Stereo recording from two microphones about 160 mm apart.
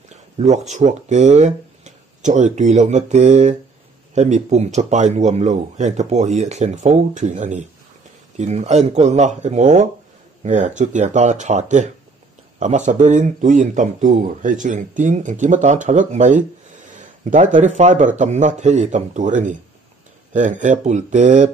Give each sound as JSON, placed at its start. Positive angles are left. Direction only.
{"t": 0.4, "sound": "speech", "side_deg": -45}